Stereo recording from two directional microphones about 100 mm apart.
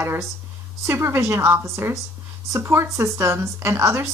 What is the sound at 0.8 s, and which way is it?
Speech, 25° right (ahead or behind).